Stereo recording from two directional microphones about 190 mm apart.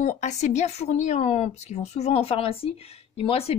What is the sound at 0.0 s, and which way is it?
A woman's voice, 40° left (ahead or behind).